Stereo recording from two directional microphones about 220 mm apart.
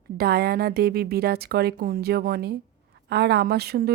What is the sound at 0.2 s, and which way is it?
A woman's voice, 45° right (ahead or behind).